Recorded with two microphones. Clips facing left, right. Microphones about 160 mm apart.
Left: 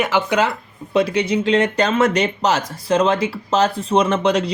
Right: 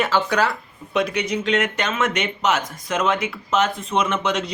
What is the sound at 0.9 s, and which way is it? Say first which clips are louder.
Speech: left 5 dB; 30° left (ahead or behind).